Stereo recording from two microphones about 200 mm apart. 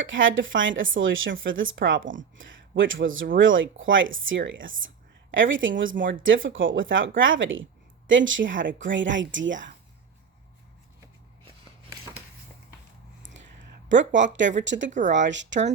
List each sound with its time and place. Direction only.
0.0 s a woman's voice: 70° right (ahead or behind)
11.9 s a sound: 15° right (ahead or behind)
13.8 s speech: 65° right (ahead or behind)